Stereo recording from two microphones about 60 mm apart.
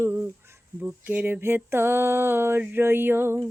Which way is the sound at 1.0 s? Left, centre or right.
Right.